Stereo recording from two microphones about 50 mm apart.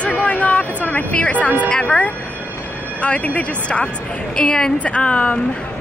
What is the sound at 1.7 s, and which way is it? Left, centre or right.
A woman's voice, centre.